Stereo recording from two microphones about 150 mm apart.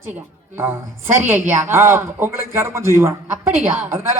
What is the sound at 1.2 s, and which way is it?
Speech, 15° right (ahead or behind).